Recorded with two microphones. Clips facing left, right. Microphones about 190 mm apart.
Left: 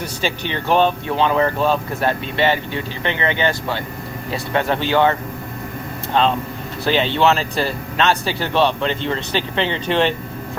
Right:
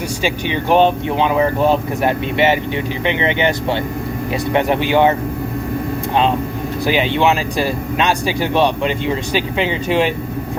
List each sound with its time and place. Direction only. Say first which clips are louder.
0.2 s speech: right 3 dB; 10° right (ahead or behind)
6.8 s speech: right 1 dB; 10° right (ahead or behind)